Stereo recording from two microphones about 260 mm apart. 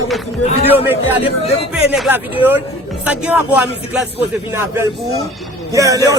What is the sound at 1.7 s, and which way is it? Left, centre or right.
Music, centre.